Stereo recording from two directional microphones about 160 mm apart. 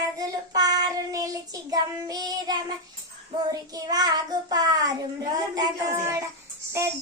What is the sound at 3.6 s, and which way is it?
Child singing, 25° right (ahead or behind).